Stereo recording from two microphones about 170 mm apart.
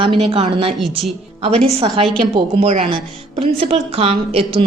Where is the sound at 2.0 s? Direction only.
35° right (ahead or behind).